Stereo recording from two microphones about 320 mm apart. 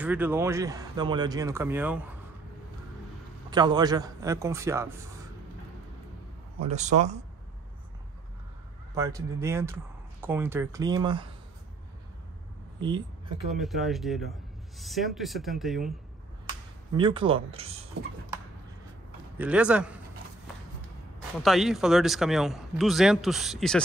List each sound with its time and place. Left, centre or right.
0.0 s speech: centre
3.4 s speech: centre
6.6 s speech: right
8.9 s speech: centre
12.8 s speech: centre
13.5 s speech: centre
16.9 s speech: centre
19.3 s speech: centre
21.4 s speech: centre